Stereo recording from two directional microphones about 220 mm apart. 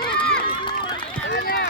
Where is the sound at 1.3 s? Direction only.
50° left (ahead or behind).